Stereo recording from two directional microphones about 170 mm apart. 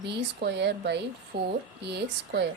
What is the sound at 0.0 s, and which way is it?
A woman's voice, 80° right.